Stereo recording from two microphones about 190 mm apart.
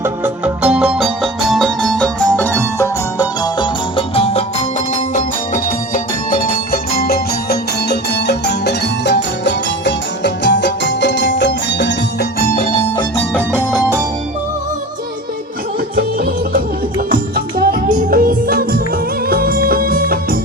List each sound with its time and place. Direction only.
0.0 s music: 5° right (ahead or behind); by 4.4 s 30° left (ahead or behind)
4.9 s music: 45° left (ahead or behind); by 11.9 s 65° left (ahead or behind)
12.4 s music: 50° left (ahead or behind)
12.6 s music: 30° left (ahead or behind)
13.7 s music: 5° right (ahead or behind)
16.0 s music: 55° right (ahead or behind)